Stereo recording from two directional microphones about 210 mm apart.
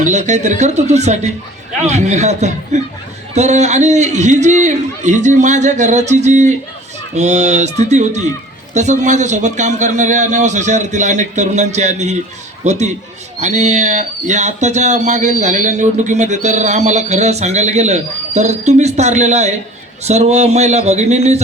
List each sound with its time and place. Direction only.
0.0 s a man's voice: 35° right (ahead or behind)